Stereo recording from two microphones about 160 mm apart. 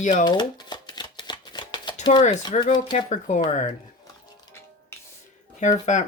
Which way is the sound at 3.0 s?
50° left (ahead or behind).